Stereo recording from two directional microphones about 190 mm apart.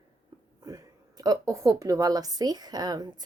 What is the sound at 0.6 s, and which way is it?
A woman's voice, 20° right (ahead or behind).